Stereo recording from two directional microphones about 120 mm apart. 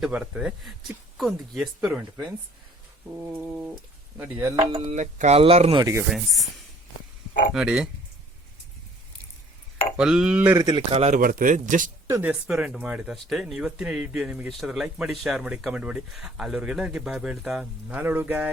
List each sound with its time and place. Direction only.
0.0 s speech: 10° right (ahead or behind)
3.3 s speech: 15° right (ahead or behind)
4.7 s speech: 65° right (ahead or behind); by 5.4 s 85° right
5.4 s speech: 55° right (ahead or behind)
5.8 s speech: 25° right (ahead or behind)
6.1 s speech: centre (ahead or behind)
7.5 s speech: 5° right (ahead or behind)
10.0 s speech: 5° right (ahead or behind)
10.5 s speech: 30° right (ahead or behind)
10.8 s a man's voice: 65° right (ahead or behind); by 11.9 s 90° right
12.3 s speech: 10° right (ahead or behind)